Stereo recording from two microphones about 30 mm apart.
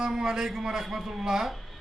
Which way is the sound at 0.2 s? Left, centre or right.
Centre.